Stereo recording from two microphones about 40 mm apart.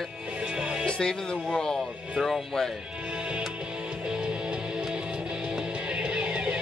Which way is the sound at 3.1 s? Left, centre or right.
Right.